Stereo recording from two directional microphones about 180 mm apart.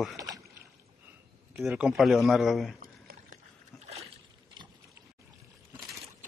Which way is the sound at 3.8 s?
35° right (ahead or behind).